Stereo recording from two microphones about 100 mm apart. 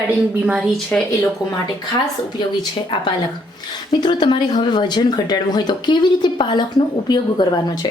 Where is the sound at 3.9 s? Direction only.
50° left (ahead or behind).